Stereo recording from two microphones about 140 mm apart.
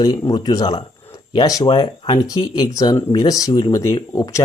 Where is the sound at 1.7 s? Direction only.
35° left (ahead or behind).